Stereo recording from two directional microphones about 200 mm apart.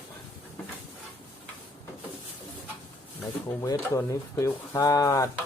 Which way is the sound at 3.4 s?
15° left (ahead or behind).